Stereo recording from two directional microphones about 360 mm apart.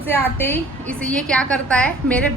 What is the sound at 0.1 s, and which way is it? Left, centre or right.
A woman's voice, centre.